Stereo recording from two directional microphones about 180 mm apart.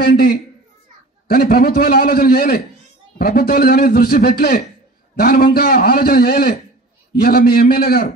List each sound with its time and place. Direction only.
0.0 s a man's voice: 60° left (ahead or behind)